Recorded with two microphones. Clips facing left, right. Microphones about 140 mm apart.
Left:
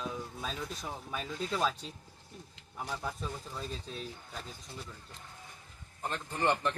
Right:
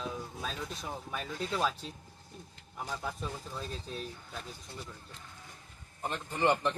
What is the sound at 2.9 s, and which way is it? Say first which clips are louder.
Speech: even; centre (ahead or behind).